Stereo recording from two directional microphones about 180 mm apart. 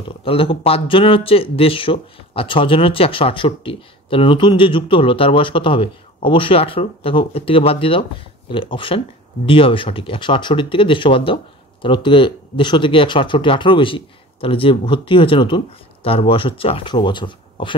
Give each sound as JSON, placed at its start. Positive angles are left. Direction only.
{"t": 0.2, "sound": "speech", "side_deg": 30}